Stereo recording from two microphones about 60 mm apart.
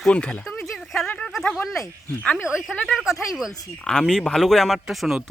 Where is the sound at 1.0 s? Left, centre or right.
Left.